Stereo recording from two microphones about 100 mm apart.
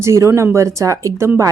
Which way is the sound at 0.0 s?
30° right (ahead or behind).